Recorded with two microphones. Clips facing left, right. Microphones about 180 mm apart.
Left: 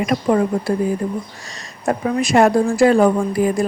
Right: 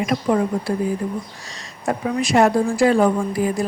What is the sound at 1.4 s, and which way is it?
Speech, 45° left (ahead or behind).